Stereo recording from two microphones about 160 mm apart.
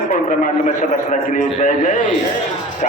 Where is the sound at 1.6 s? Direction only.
50° left (ahead or behind).